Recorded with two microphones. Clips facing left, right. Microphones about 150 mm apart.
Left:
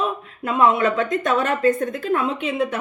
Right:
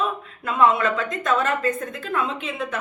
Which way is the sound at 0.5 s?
35° left (ahead or behind).